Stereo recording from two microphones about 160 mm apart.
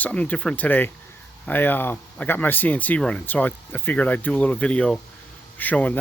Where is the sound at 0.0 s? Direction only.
10° left (ahead or behind).